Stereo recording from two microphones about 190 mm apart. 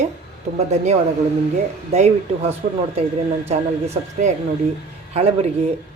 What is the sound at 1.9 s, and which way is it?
A woman's voice, 35° right (ahead or behind).